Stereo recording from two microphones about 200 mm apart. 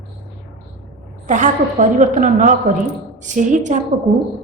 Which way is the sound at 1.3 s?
40° right (ahead or behind).